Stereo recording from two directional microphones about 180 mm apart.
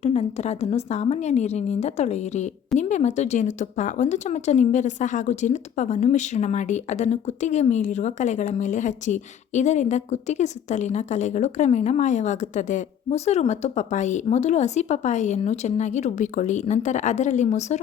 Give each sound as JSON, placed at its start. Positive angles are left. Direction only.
{"t": 0.0, "sound": "speech", "side_deg": 35}